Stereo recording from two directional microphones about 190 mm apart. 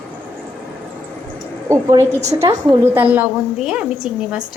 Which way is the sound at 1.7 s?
15° right (ahead or behind).